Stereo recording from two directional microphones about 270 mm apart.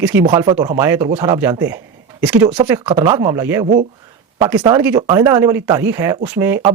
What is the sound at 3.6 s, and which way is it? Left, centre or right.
Speech, right.